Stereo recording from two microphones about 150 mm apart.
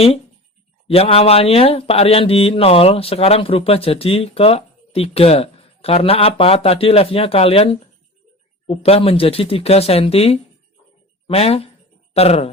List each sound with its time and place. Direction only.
0.9 s speech: 40° left (ahead or behind)